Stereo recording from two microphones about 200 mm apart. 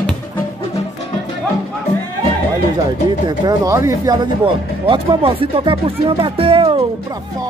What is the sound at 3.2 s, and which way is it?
Speech, 20° right (ahead or behind).